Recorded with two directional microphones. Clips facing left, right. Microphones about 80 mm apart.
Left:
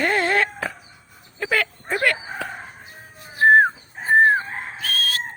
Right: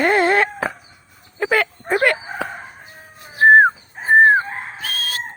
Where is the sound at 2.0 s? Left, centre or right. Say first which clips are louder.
Right 3 dB; right.